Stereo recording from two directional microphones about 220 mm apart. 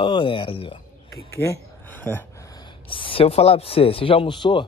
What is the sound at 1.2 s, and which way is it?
A man's voice, 15° left (ahead or behind).